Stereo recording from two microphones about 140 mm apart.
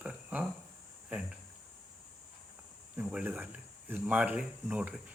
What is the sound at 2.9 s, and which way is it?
Speech, 10° right (ahead or behind).